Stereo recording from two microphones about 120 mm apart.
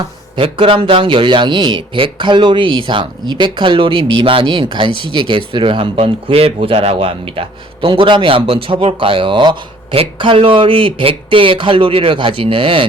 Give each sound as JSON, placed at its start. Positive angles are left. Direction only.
{"t": 0.3, "sound": "a man's voice", "side_deg": -50}